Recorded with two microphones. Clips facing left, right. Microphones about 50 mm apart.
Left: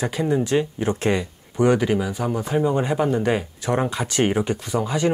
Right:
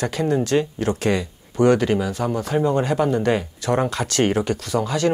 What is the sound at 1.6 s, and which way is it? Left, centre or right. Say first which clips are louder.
Speech: right 2 dB; centre.